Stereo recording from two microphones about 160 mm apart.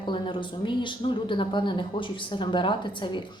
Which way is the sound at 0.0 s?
30° left (ahead or behind).